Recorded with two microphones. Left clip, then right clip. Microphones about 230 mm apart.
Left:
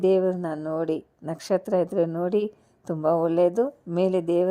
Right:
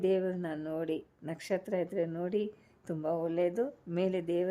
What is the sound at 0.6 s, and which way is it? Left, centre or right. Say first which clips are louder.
A woman's voice: left 9 dB; centre.